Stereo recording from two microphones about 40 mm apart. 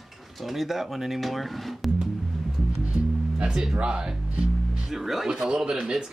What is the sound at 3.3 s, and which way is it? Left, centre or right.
Music, right.